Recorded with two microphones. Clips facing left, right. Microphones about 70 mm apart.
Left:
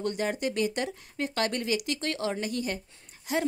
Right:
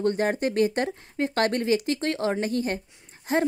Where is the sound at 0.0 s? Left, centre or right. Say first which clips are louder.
Right 5 dB; right.